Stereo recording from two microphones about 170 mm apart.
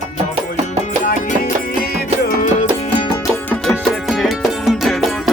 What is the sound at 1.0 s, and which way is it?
Music, 50° left (ahead or behind).